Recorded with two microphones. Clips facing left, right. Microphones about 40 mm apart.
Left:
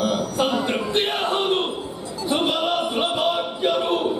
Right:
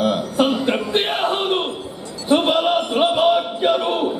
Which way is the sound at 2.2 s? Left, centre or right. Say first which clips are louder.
Right 5 dB; centre.